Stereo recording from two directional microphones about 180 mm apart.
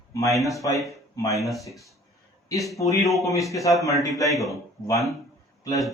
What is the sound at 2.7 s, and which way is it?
Speech, 20° left (ahead or behind).